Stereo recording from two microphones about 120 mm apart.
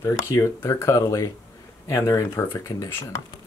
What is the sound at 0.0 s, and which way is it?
Speech, 25° left (ahead or behind).